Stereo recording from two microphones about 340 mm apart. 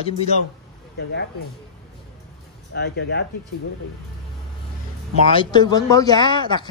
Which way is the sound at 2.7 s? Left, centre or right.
Left.